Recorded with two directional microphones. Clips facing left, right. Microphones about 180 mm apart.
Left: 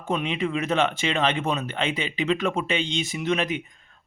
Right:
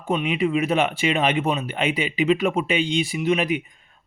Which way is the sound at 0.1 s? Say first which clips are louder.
Right 4 dB; 10° right (ahead or behind).